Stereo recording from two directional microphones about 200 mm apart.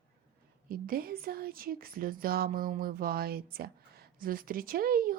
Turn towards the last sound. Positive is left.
turn(degrees=-45)  # may be behind; listen again after turning